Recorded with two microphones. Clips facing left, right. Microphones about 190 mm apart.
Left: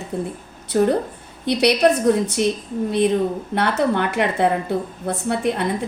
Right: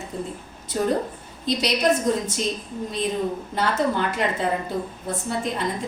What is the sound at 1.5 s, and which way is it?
A woman's voice, 65° left (ahead or behind).